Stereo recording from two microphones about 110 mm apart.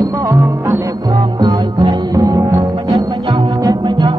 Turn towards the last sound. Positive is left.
turn(degrees=-35)  # may be behind; listen again after turning